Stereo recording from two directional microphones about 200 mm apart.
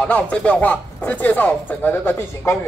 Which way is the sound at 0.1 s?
5° left (ahead or behind).